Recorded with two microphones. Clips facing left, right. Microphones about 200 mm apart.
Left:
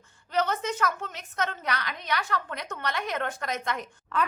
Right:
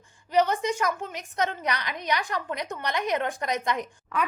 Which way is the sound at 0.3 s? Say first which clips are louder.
Right 4 dB; 15° right (ahead or behind).